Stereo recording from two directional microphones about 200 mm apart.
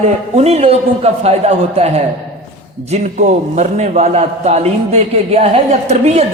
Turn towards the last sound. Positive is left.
turn(degrees=-35)  # may be behind; listen again after turning